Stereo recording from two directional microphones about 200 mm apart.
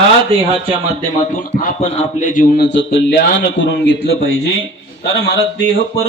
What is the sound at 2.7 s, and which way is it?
A man's voice, 60° left (ahead or behind).